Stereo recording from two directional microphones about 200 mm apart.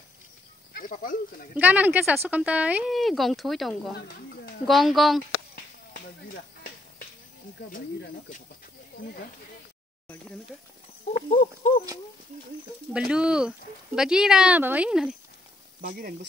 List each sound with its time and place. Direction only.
0.7 s speech: 45° left (ahead or behind)
1.5 s speech: 10° right (ahead or behind)
5.9 s a sound: 45° left (ahead or behind)
7.7 s speech: 45° left (ahead or behind)
11.2 s a sound: 35° left (ahead or behind)
13.1 s speech: 5° right (ahead or behind)
15.8 s speech: 45° right (ahead or behind)